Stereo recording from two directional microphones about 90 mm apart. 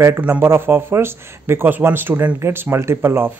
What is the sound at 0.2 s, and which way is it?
Speech, 25° right (ahead or behind).